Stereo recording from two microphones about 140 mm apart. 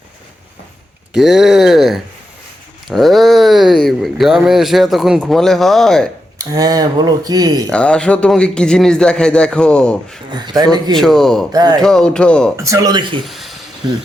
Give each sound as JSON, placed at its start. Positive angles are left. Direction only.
{"t": 1.1, "sound": "speech", "side_deg": -5}
{"t": 6.4, "sound": "speech", "side_deg": -25}
{"t": 7.7, "sound": "a man's voice", "side_deg": 5}
{"t": 10.3, "sound": "speech", "side_deg": -30}
{"t": 10.9, "sound": "speech", "side_deg": 5}
{"t": 11.5, "sound": "speech", "side_deg": -30}
{"t": 11.8, "sound": "speech", "side_deg": 5}
{"t": 12.5, "sound": "speech", "side_deg": -20}
{"t": 13.2, "sound": "speech", "side_deg": 0}